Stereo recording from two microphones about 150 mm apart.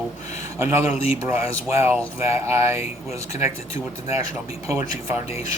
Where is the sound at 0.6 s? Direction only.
20° right (ahead or behind).